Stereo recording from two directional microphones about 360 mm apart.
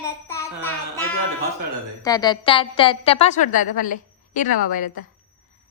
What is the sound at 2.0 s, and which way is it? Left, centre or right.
A woman's voice, centre.